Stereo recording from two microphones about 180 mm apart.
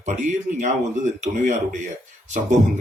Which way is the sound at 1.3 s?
45° right (ahead or behind).